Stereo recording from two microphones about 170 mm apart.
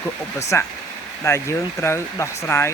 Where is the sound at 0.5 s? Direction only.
15° left (ahead or behind).